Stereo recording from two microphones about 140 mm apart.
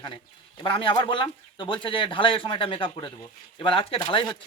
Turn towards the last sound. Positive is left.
turn(degrees=35)  # may be behind; listen again after turning